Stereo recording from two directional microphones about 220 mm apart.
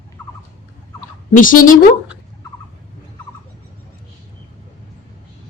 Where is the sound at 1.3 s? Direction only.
40° left (ahead or behind).